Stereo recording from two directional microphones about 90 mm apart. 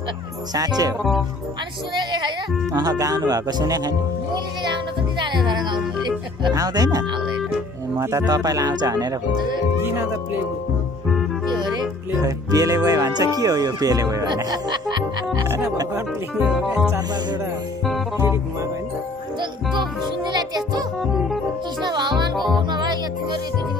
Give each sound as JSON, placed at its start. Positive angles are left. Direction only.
{"t": 0.6, "sound": "speech", "side_deg": -45}
{"t": 2.0, "sound": "speech", "side_deg": -50}
{"t": 5.2, "sound": "speech", "side_deg": -60}
{"t": 6.5, "sound": "speech", "side_deg": -45}
{"t": 8.3, "sound": "speech", "side_deg": -45}
{"t": 11.5, "sound": "speech", "side_deg": -50}
{"t": 15.4, "sound": "speech", "side_deg": -30}
{"t": 16.3, "sound": "speech", "side_deg": -5}
{"t": 18.1, "sound": "music", "side_deg": -30}
{"t": 19.7, "sound": "music", "side_deg": -55}
{"t": 21.0, "sound": "music", "side_deg": 0}
{"t": 21.8, "sound": "music", "side_deg": -55}
{"t": 22.3, "sound": "music", "side_deg": 0}
{"t": 22.6, "sound": "music", "side_deg": -55}